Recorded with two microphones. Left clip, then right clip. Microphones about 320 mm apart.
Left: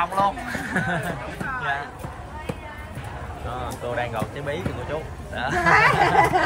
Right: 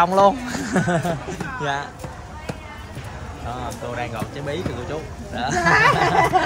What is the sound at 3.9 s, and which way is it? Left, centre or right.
Speech, centre.